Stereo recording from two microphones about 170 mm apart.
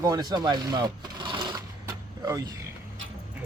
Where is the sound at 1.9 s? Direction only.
20° right (ahead or behind).